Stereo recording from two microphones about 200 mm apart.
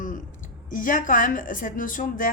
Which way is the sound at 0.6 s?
40° left (ahead or behind).